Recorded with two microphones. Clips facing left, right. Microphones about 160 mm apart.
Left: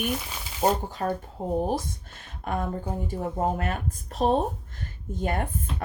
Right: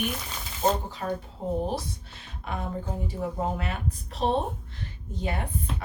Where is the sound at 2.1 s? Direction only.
50° left (ahead or behind).